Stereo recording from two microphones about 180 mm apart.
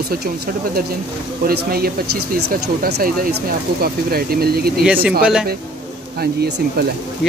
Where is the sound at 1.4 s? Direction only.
60° right (ahead or behind).